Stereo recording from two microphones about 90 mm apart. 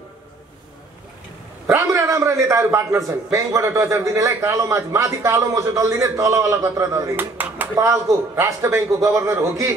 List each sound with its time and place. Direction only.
1.7 s a man's voice: 35° right (ahead or behind)
7.2 s speech: 20° right (ahead or behind)
7.7 s a man's voice: 35° right (ahead or behind)